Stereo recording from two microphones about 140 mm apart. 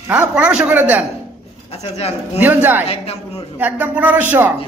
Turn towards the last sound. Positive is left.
turn(degrees=-10)  # may be behind; listen again after turning